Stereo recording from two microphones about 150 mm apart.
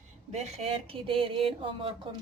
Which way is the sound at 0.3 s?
45° right (ahead or behind).